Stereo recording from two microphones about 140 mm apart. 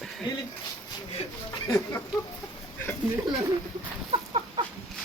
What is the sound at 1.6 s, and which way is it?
Speech, 20° left (ahead or behind).